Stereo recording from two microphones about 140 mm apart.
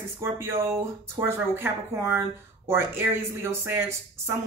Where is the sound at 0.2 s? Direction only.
20° right (ahead or behind).